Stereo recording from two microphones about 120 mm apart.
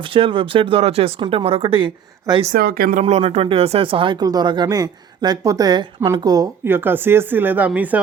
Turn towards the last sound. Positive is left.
turn(degrees=-15)  # may be behind; listen again after turning